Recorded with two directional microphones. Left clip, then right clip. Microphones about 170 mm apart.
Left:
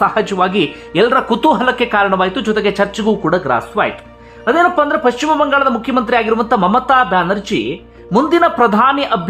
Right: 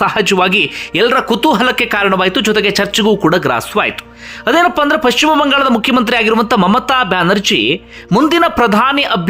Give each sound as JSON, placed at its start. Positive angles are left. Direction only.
{"t": 0.0, "sound": "a man's voice", "side_deg": -20}